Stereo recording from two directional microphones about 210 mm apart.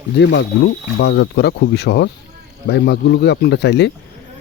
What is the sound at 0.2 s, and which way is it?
Speech, 55° left (ahead or behind).